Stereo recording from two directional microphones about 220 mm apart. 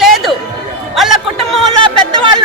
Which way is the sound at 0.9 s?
Centre (ahead or behind).